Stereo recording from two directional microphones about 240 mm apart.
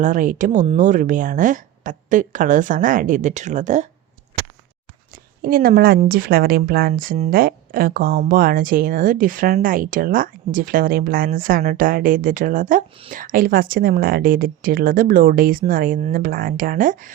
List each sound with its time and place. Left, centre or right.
0.0 s speech: right
5.4 s speech: right